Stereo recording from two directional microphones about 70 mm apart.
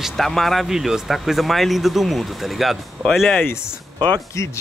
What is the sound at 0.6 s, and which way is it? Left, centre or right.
Speech, centre.